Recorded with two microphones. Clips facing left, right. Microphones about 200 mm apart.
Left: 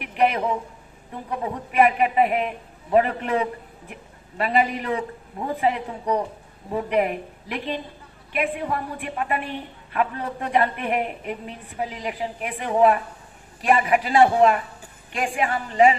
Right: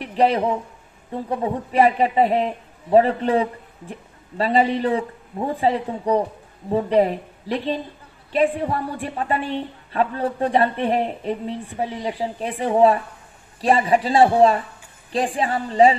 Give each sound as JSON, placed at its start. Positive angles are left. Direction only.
{"t": 0.0, "sound": "a man's voice", "side_deg": -30}